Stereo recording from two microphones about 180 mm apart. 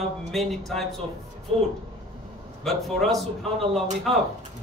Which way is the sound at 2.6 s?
Centre (ahead or behind).